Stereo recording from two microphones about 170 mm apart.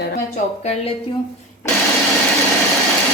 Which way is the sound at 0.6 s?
40° left (ahead or behind).